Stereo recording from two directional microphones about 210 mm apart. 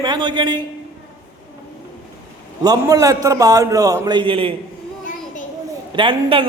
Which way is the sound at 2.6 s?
15° right (ahead or behind).